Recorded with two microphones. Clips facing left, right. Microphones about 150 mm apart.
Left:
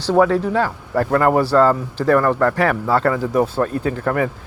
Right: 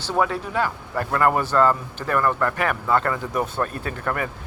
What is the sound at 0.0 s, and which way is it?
Speech, 35° left (ahead or behind).